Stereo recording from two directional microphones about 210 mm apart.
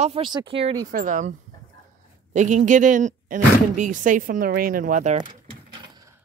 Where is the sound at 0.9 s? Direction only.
40° right (ahead or behind).